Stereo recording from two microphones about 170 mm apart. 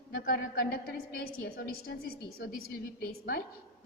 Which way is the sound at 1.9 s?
90° left.